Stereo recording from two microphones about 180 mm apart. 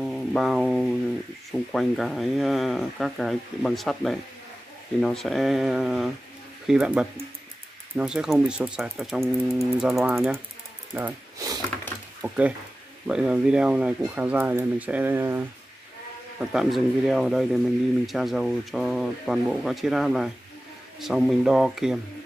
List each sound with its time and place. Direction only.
0.0 s a sound: 5° left (ahead or behind)
1.5 s speech: centre (ahead or behind)
11.0 s speech: 15° right (ahead or behind)
12.2 s speech: 10° right (ahead or behind)
16.3 s speech: centre (ahead or behind)